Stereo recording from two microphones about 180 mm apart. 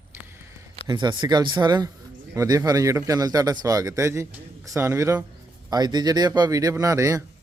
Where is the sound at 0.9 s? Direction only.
25° right (ahead or behind).